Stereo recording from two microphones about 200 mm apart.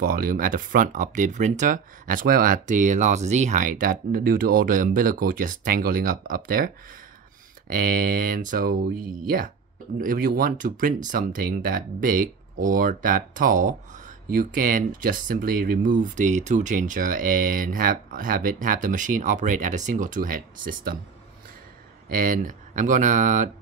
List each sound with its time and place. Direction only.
0.0 s speech: 45° right (ahead or behind)
7.7 s speech: 45° right (ahead or behind)
22.1 s speech: 45° right (ahead or behind)